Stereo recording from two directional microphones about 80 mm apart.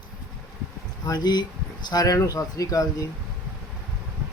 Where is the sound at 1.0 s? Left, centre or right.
Left.